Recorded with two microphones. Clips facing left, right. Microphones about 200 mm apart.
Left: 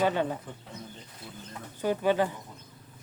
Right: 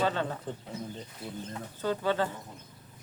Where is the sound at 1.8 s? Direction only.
15° left (ahead or behind).